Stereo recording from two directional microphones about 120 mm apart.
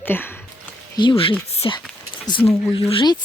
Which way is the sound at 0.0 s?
15° left (ahead or behind).